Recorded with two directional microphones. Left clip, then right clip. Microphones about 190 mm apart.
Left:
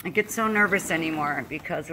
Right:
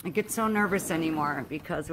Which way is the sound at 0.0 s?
15° right (ahead or behind).